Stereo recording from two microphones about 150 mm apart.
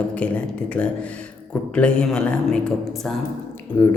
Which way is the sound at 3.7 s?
20° left (ahead or behind).